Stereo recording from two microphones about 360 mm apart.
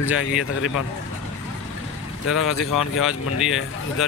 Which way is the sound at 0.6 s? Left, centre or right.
Left.